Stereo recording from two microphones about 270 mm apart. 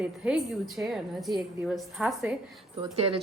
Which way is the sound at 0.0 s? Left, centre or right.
Centre.